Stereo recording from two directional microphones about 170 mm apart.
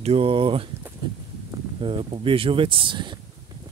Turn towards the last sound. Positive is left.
turn(degrees=-30)  # may be behind; listen again after turning